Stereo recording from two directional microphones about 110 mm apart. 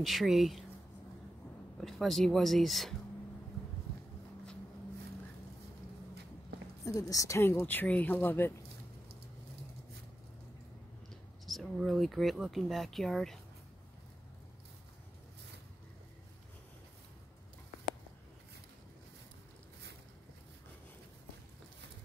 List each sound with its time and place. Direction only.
0.0 s speech: centre (ahead or behind)
1.8 s speech: centre (ahead or behind)
6.8 s speech: 30° left (ahead or behind)
11.4 s speech: centre (ahead or behind)